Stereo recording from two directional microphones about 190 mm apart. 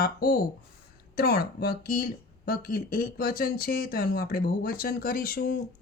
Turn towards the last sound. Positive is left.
turn(degrees=50)  # may be behind; listen again after turning